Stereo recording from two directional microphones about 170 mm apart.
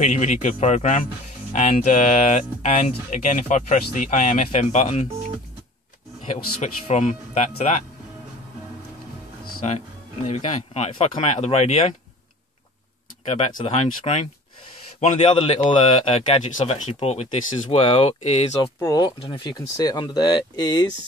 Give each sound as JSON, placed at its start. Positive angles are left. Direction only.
{"t": 0.0, "sound": "speech", "side_deg": 45}
{"t": 6.3, "sound": "speech", "side_deg": 40}
{"t": 9.7, "sound": "speech", "side_deg": 40}
{"t": 13.3, "sound": "speech", "side_deg": 40}
{"t": 18.8, "sound": "speech", "side_deg": 20}